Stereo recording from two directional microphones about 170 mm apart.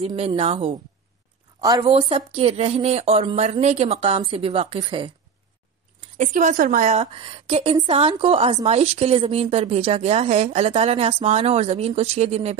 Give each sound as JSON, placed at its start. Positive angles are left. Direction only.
{"t": 0.0, "sound": "a woman's voice", "side_deg": -35}
{"t": 1.6, "sound": "a woman's voice", "side_deg": -20}
{"t": 1.9, "sound": "a woman's voice", "side_deg": -35}
{"t": 6.1, "sound": "a woman's voice", "side_deg": -45}